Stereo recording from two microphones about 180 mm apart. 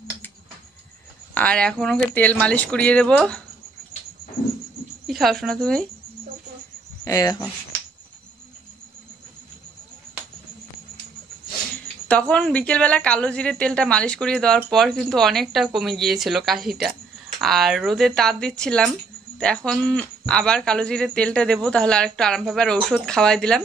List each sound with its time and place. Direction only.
1.3 s a woman's voice: 5° left (ahead or behind)
5.0 s speech: centre (ahead or behind)
7.1 s speech: 20° left (ahead or behind)
12.1 s a woman's voice: 5° left (ahead or behind)